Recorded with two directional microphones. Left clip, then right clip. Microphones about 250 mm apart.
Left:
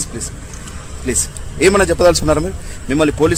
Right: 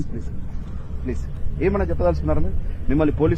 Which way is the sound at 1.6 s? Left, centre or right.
Left.